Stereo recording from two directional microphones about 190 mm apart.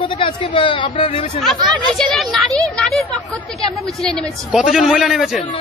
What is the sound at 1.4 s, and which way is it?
Speech, centre (ahead or behind).